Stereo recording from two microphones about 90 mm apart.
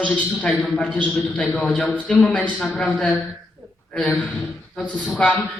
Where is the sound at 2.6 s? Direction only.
Centre (ahead or behind).